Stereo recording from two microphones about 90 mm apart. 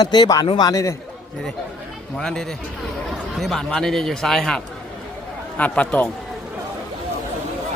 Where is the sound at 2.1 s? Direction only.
5° left (ahead or behind).